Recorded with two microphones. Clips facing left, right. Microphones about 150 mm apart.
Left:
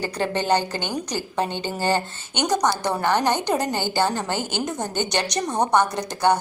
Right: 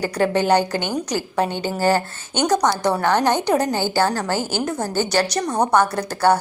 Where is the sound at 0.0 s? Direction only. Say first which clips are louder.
Right 5 dB; 10° right (ahead or behind).